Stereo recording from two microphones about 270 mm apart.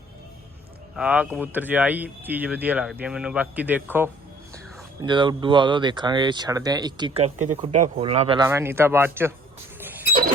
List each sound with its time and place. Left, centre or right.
0.9 s speech: centre; by 8.4 s right
8.4 s speech: centre
10.1 s a sound: right